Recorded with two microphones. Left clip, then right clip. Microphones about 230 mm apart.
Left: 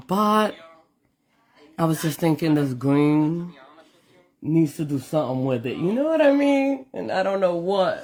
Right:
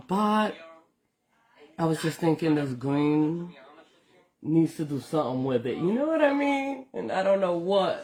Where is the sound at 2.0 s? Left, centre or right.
Left.